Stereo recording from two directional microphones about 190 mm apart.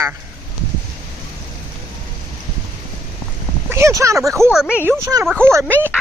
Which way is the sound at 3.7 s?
15° right (ahead or behind).